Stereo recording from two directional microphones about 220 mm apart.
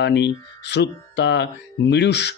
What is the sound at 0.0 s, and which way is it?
Speech, 50° left (ahead or behind).